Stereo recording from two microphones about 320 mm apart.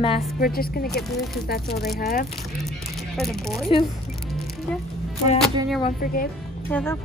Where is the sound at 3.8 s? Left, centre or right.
Centre.